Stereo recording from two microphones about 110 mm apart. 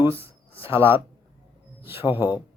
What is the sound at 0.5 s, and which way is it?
Speech, 55° left (ahead or behind).